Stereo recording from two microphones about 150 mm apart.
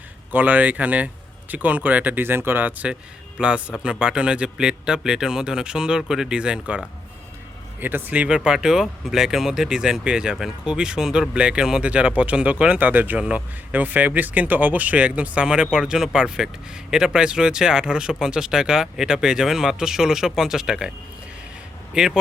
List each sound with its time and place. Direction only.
0.3 s speech: 10° right (ahead or behind)
21.9 s speech: 5° right (ahead or behind)